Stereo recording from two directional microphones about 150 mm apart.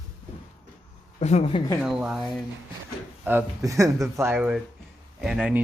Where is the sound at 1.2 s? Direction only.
45° left (ahead or behind).